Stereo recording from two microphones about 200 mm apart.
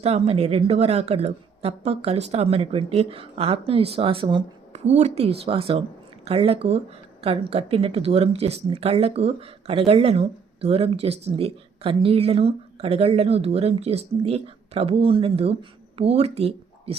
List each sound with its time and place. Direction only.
0.0 s speech: 30° right (ahead or behind)